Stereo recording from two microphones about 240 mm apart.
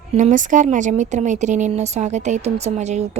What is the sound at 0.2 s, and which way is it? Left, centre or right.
Speech, right.